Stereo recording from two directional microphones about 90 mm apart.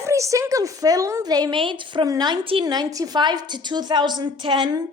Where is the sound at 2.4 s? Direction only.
85° right.